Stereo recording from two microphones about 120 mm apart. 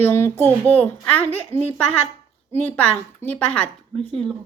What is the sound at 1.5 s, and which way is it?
Speech, 60° right (ahead or behind).